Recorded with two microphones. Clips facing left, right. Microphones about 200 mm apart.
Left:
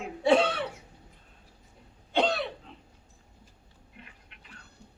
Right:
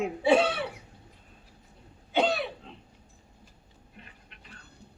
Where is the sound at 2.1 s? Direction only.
5° right (ahead or behind).